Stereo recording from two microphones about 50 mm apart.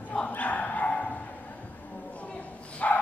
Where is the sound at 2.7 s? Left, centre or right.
Left.